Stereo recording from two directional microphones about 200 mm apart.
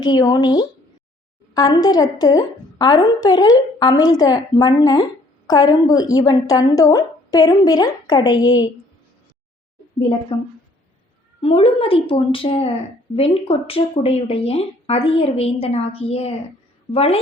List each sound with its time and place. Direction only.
0.0 s a woman's voice: 20° left (ahead or behind)
10.0 s a woman's voice: 25° left (ahead or behind)
11.3 s a woman's voice: 30° left (ahead or behind)